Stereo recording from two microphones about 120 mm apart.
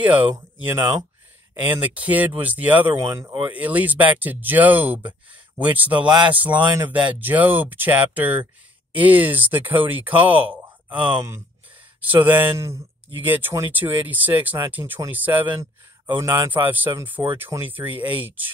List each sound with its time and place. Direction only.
0.0 s speech: 15° right (ahead or behind)
1.5 s speech: 15° right (ahead or behind)
5.9 s speech: 40° right (ahead or behind)
6.3 s speech: 15° right (ahead or behind)
12.3 s speech: 15° right (ahead or behind)